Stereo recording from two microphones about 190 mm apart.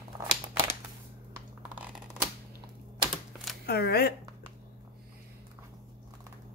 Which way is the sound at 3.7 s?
55° left (ahead or behind).